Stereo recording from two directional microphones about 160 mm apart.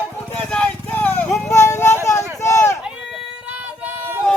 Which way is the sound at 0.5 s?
10° left (ahead or behind).